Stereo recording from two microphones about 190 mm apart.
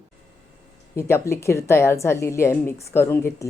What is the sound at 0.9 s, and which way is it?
A woman's voice, 15° left (ahead or behind).